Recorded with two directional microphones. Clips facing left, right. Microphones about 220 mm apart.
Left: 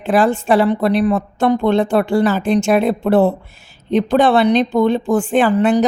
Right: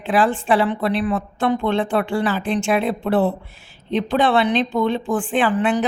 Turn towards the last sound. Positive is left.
turn(degrees=40)  # may be behind; listen again after turning